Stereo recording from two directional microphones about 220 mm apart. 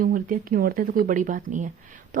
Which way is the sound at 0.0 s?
40° right (ahead or behind).